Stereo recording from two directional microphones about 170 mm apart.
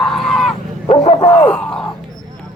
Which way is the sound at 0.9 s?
40° left (ahead or behind).